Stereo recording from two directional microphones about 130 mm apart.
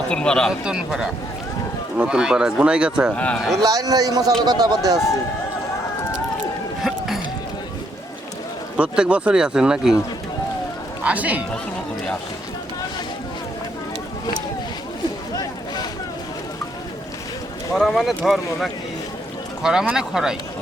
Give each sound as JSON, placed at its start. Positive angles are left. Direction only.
{"t": 0.1, "sound": "a man's voice", "side_deg": 5}
{"t": 0.6, "sound": "speech", "side_deg": -5}
{"t": 3.2, "sound": "a man's voice", "side_deg": 10}
{"t": 3.6, "sound": "a man's voice", "side_deg": -30}
{"t": 8.7, "sound": "speech", "side_deg": -10}
{"t": 11.0, "sound": "speech", "side_deg": -10}
{"t": 15.4, "sound": "boat", "side_deg": 30}
{"t": 17.7, "sound": "speech", "side_deg": 0}
{"t": 19.6, "sound": "speech", "side_deg": -5}